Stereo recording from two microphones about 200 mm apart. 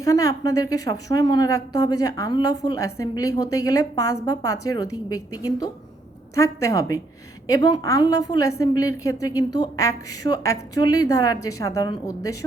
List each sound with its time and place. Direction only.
0.0 s a woman's voice: 15° left (ahead or behind)